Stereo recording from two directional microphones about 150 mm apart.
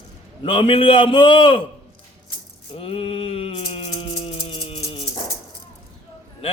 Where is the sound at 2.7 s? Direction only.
40° left (ahead or behind).